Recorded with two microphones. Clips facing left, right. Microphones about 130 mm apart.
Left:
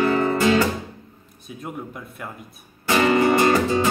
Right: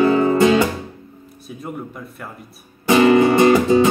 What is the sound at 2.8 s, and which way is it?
Music, 20° right (ahead or behind).